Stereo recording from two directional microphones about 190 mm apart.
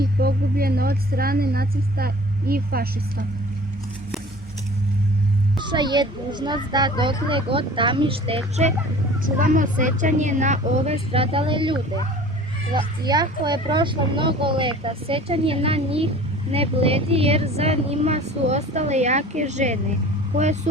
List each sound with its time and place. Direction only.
0.0 s speech: 55° right (ahead or behind)
5.5 s speech: 25° right (ahead or behind)
9.2 s speech: 45° right (ahead or behind)